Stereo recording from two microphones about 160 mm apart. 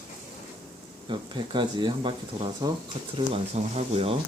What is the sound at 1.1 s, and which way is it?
Speech, 30° right (ahead or behind).